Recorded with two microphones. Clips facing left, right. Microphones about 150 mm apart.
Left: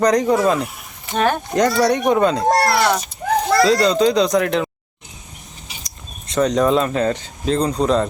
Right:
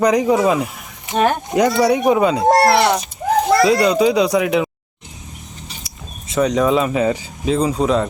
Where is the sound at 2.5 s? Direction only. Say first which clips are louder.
Right 3 dB; 25° right (ahead or behind).